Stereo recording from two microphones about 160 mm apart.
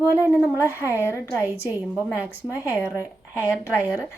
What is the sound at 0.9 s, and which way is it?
Speech, 15° left (ahead or behind).